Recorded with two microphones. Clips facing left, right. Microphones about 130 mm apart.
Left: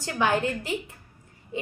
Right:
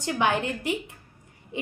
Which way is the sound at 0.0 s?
20° right (ahead or behind).